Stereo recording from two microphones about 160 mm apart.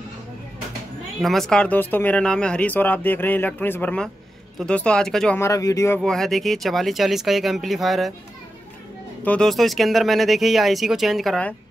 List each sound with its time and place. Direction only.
1.2 s speech: centre (ahead or behind)
5.4 s speech: 20° left (ahead or behind)
5.9 s speech: centre (ahead or behind)
9.2 s speech: 5° left (ahead or behind)